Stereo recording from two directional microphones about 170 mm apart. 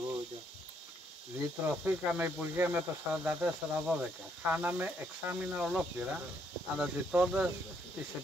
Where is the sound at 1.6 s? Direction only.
10° right (ahead or behind).